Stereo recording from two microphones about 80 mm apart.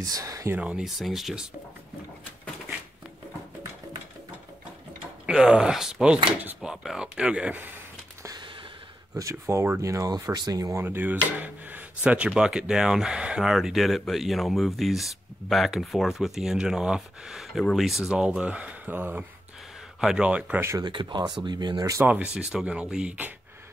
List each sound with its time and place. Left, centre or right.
0.0 s speech: right
0.6 s speech: centre
0.8 s speech: centre
5.3 s speech: centre
9.1 s speech: right
10.8 s speech: right
20.0 s speech: centre
20.8 s speech: right
22.0 s speech: centre